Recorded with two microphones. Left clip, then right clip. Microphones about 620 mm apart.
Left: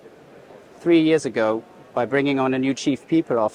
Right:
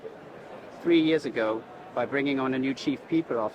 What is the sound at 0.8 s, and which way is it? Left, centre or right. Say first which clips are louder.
Speech: left 6 dB; left.